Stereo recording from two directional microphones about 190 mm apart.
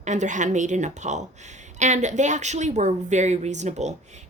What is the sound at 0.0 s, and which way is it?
A woman's voice, 40° right (ahead or behind).